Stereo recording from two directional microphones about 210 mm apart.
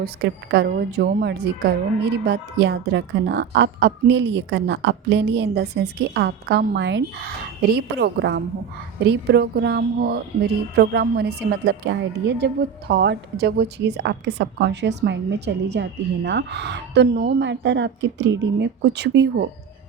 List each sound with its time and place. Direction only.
0.0 s a woman's voice: 50° right (ahead or behind)